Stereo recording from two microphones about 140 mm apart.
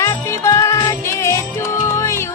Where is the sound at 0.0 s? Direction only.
25° left (ahead or behind).